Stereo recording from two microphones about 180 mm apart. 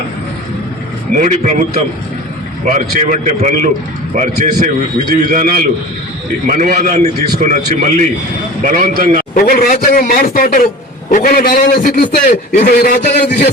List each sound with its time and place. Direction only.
1.1 s a man's voice: 45° right (ahead or behind)
2.6 s a man's voice: 45° right (ahead or behind)
9.3 s a man's voice: 55° left (ahead or behind)
12.7 s a man's voice: 65° left (ahead or behind)